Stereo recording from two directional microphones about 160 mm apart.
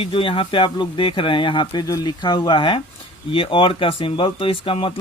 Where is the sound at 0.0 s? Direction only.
35° left (ahead or behind).